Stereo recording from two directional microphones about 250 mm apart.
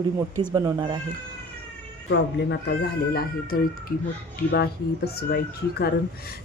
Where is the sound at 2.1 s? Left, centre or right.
Left.